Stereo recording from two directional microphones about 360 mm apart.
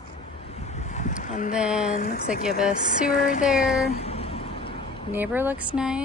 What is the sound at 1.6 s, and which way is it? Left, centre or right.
Speech, centre.